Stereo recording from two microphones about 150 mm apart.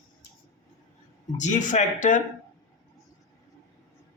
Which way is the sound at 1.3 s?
55° left (ahead or behind).